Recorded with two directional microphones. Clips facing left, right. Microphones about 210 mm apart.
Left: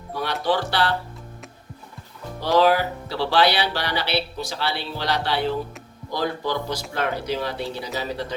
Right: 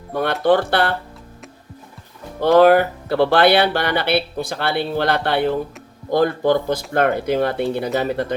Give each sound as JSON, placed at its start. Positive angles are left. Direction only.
{"t": 0.1, "sound": "speech", "side_deg": -55}
{"t": 2.4, "sound": "speech", "side_deg": -55}